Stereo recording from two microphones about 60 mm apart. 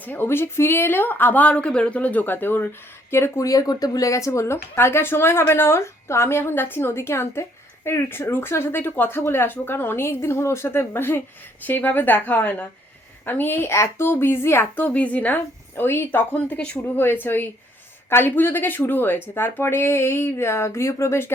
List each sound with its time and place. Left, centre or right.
0.0 s speech: left
0.3 s speech: left
3.4 s a woman's voice: left
14.8 s a woman's voice: left
16.3 s a woman's voice: left
16.7 s speech: left